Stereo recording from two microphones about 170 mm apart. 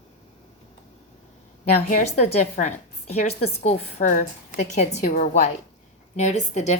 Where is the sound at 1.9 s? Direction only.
45° left (ahead or behind).